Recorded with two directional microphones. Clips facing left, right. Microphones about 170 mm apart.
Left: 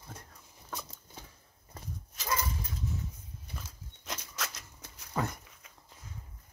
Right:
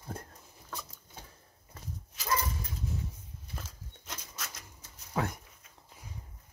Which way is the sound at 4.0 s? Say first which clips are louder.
Left 5 dB; 85° left.